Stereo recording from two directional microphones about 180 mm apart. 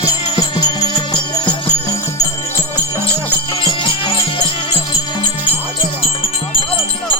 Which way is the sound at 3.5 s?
30° left (ahead or behind).